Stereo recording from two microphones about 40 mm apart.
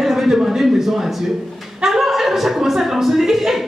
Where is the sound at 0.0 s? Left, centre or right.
Centre.